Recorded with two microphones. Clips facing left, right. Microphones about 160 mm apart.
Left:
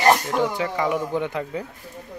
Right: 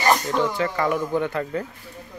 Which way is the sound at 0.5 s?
10° left (ahead or behind).